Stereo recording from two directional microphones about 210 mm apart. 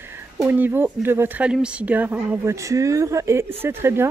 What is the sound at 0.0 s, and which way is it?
Speech, 10° right (ahead or behind).